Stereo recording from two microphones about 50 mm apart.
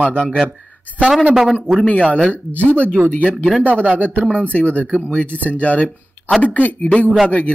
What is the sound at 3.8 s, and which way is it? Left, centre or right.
Speech, right.